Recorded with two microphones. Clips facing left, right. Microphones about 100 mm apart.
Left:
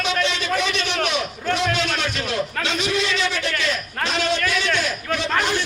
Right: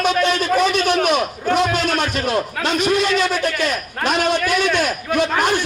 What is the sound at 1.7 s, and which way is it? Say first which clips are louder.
A man's voice: right 4 dB; 45° right (ahead or behind).